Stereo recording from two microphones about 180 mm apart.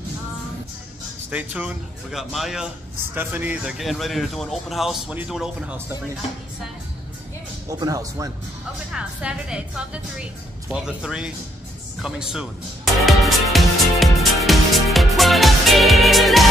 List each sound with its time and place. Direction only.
1.3 s a man's voice: 5° right (ahead or behind)
7.8 s speech: 20° right (ahead or behind)
8.9 s a man's voice: 5° right (ahead or behind)
12.0 s music: 5° right (ahead or behind)